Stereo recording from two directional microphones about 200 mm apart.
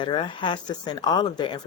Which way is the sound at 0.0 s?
25° left (ahead or behind).